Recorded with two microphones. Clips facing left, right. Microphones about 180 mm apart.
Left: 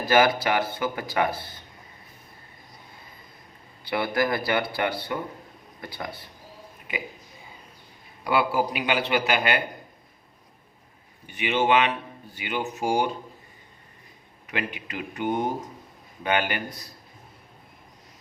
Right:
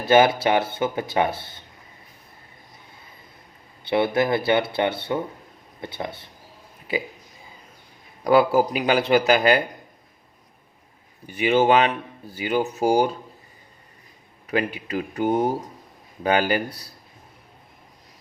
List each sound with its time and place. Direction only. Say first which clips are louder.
0.0 s speech: right 4 dB; 25° right (ahead or behind)
3.8 s speech: right 4 dB; 25° right (ahead or behind)
8.2 s a man's voice: right 6 dB; 40° right (ahead or behind)
11.3 s a man's voice: right 5 dB; 40° right (ahead or behind)
14.5 s a man's voice: right 7 dB; 35° right (ahead or behind)